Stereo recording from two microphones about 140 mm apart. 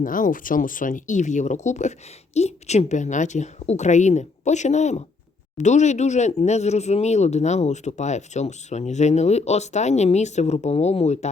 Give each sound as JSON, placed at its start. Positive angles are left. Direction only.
{"t": 0.0, "sound": "a woman's voice", "side_deg": 75}